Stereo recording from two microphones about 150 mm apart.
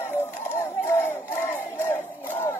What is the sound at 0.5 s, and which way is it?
Battle cry, 20° left (ahead or behind).